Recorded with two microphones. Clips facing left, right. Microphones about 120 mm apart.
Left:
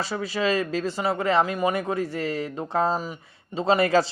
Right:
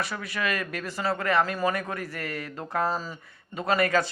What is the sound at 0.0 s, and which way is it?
Speech, 25° left (ahead or behind).